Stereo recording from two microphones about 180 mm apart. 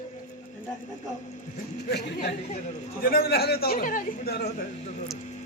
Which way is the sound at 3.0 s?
55° left (ahead or behind).